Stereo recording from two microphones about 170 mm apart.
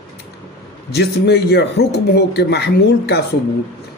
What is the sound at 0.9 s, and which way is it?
Speech, 75° left (ahead or behind).